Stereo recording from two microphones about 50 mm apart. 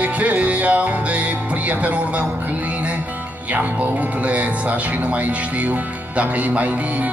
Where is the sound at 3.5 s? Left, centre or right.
Right.